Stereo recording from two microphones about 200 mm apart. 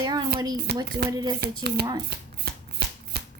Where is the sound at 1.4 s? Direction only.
50° right (ahead or behind).